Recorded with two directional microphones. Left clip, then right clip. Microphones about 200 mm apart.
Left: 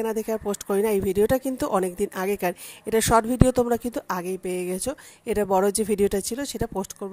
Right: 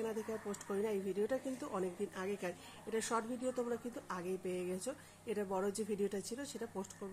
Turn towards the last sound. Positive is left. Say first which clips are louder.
# left 15 dB
turn(degrees=50)  # may be behind; listen again after turning